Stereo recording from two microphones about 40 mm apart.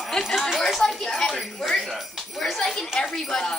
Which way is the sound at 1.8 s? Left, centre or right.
Centre.